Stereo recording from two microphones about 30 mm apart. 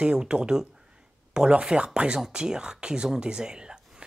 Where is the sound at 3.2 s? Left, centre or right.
Right.